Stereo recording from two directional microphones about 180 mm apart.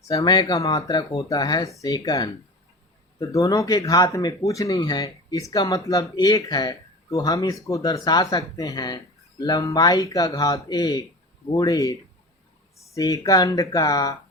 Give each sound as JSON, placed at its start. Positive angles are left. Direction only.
{"t": 0.1, "sound": "speech", "side_deg": 20}